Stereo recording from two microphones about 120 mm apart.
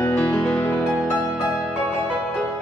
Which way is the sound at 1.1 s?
10° right (ahead or behind).